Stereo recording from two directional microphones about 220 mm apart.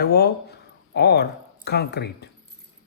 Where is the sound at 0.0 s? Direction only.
45° left (ahead or behind).